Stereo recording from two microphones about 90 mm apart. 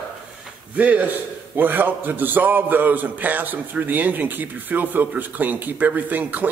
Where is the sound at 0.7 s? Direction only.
15° right (ahead or behind).